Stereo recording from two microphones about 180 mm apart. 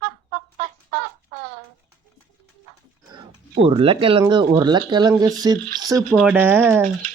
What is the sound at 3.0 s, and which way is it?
Speech, 30° right (ahead or behind).